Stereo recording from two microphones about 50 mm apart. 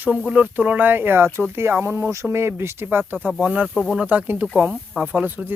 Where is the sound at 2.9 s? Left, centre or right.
Right.